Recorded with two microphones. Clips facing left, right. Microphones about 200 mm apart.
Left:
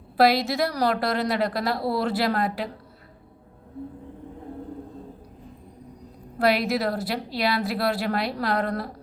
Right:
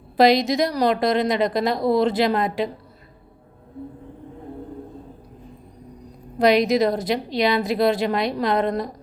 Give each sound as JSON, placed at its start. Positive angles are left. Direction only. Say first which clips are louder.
{"t": 0.2, "sound": "a woman's voice", "louder": "right 4 dB", "side_deg": -20}
{"t": 6.4, "sound": "a woman's voice", "louder": "right 6 dB", "side_deg": -20}